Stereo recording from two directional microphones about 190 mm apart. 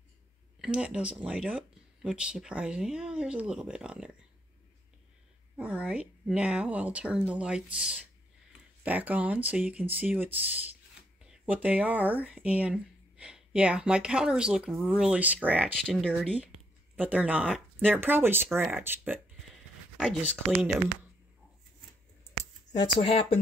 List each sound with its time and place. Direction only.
0.6 s speech: 5° right (ahead or behind)
5.6 s a woman's voice: 5° right (ahead or behind)
15.8 s a woman's voice: centre (ahead or behind)
22.2 s a sound: 15° left (ahead or behind)